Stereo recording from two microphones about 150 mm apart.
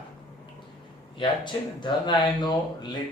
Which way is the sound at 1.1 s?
30° left (ahead or behind).